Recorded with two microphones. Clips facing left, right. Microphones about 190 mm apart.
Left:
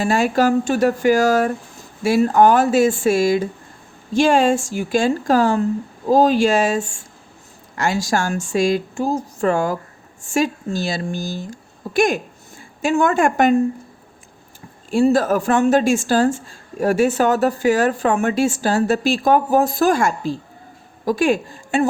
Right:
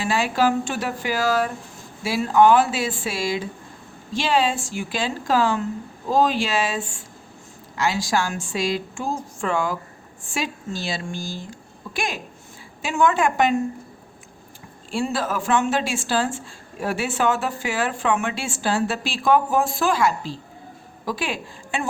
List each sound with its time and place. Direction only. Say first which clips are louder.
0.0 s a woman's voice: left 4 dB; 45° left (ahead or behind)
14.8 s a woman's voice: left 9 dB; 45° left (ahead or behind)